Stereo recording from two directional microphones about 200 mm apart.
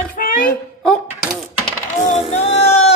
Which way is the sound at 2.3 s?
30° left (ahead or behind).